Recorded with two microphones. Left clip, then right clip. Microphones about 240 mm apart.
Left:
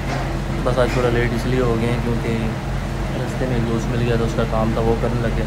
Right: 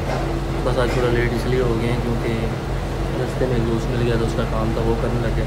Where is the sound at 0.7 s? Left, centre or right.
Centre.